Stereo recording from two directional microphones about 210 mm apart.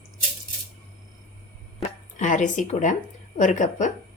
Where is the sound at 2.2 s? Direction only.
35° left (ahead or behind).